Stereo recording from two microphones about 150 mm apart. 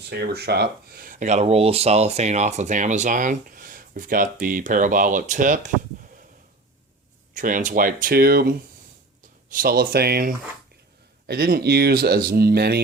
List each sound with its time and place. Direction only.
0.1 s speech: 90° right; by 5.7 s 60° right (ahead or behind)
7.3 s speech: 60° right (ahead or behind); by 8.5 s 90° right
9.5 s speech: 80° right